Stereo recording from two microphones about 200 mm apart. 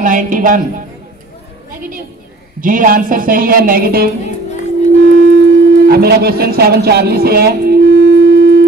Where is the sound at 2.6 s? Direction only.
40° right (ahead or behind).